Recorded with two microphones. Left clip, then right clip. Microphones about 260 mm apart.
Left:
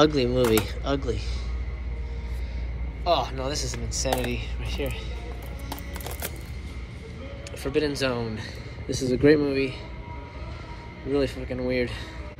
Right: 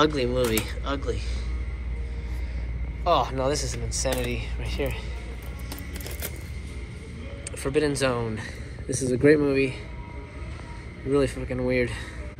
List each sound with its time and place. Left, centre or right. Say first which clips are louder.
0.0 s speech: left 2 dB; centre
3.0 s speech: right 2 dB; centre
7.6 s speech: right 1 dB; centre
11.1 s speech: right 2 dB; centre